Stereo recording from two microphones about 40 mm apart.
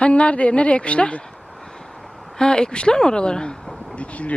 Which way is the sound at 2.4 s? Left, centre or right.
Left.